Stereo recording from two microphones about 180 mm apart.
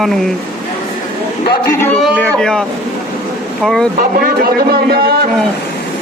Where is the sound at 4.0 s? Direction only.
55° right (ahead or behind).